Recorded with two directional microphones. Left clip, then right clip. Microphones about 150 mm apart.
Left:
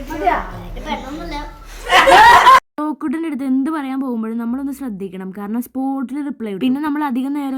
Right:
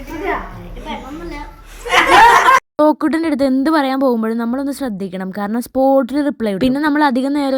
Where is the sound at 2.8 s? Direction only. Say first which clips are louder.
Right 9 dB; 35° right (ahead or behind).